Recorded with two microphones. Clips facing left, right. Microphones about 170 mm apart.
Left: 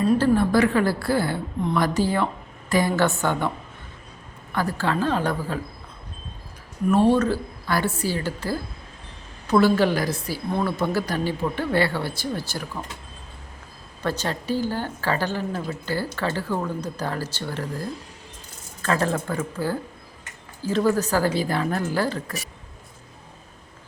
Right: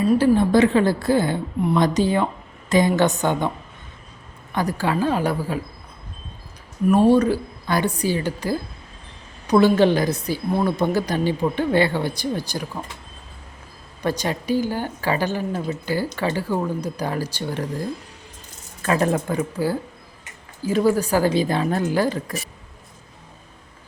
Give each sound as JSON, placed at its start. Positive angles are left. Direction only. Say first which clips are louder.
{"t": 0.0, "sound": "a woman's voice", "louder": "right 2 dB", "side_deg": -15}
{"t": 4.5, "sound": "a woman's voice", "louder": "right 2 dB", "side_deg": -15}
{"t": 6.8, "sound": "a woman's voice", "louder": "right 3 dB", "side_deg": -10}
{"t": 14.0, "sound": "a woman's voice", "louder": "right 3 dB", "side_deg": -15}